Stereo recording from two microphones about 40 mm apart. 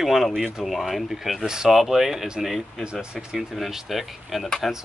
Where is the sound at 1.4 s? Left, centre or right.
Centre.